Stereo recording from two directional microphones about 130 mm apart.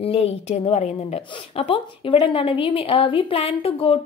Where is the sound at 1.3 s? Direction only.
45° left (ahead or behind).